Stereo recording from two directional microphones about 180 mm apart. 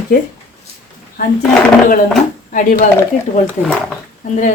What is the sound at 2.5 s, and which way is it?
Speech, 45° left (ahead or behind).